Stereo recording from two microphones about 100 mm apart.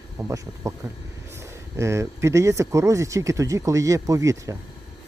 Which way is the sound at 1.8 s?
30° right (ahead or behind).